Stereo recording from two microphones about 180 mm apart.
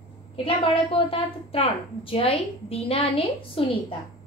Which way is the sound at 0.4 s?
30° left (ahead or behind).